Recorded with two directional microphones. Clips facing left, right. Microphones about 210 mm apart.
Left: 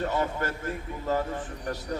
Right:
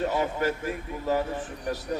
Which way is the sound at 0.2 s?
15° right (ahead or behind).